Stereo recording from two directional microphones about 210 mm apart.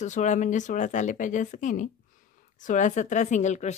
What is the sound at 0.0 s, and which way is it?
Speech, 35° left (ahead or behind).